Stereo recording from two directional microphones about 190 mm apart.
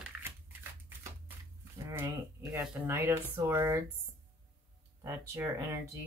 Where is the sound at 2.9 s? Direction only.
15° right (ahead or behind).